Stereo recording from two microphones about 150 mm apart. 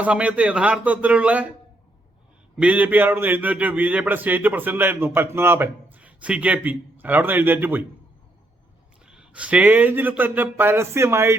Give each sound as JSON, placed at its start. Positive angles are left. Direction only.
{"t": 0.0, "sound": "a man's voice", "side_deg": -10}
{"t": 2.6, "sound": "a man's voice", "side_deg": -10}
{"t": 9.0, "sound": "a man's voice", "side_deg": -5}